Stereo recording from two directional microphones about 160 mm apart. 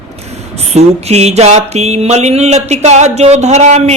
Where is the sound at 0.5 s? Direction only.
40° right (ahead or behind).